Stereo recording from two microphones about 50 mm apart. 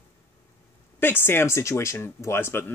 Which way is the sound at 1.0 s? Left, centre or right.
Left.